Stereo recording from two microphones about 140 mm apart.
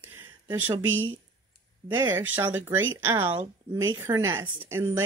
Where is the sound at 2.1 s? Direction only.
15° right (ahead or behind).